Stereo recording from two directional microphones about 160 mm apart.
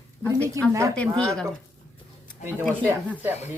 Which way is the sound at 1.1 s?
5° left (ahead or behind).